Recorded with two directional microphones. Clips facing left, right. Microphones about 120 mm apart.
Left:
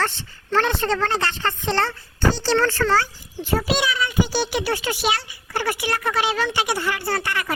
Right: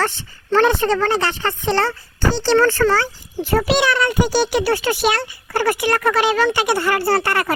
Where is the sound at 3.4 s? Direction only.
60° right (ahead or behind).